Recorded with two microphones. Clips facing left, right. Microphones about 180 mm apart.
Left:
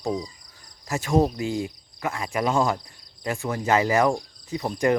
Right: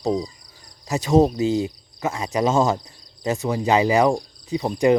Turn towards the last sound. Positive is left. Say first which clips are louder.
# right 4 dB
turn(degrees=-15)  # may be behind; listen again after turning